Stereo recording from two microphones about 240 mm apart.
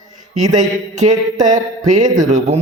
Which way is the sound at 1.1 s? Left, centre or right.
Centre.